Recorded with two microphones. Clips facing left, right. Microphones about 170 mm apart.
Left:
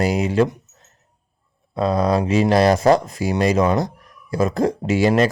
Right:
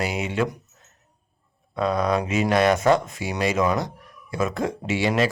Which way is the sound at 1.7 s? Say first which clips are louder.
Left 4 dB; 35° left (ahead or behind).